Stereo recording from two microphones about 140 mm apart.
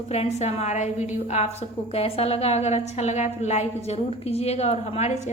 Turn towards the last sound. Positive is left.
turn(degrees=55)  # may be behind; listen again after turning